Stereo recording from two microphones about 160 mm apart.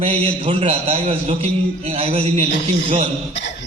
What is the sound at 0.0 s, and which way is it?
A man's voice, 35° right (ahead or behind).